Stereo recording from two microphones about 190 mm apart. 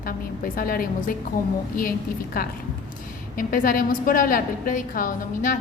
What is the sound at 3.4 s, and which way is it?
A woman's voice, 45° left (ahead or behind).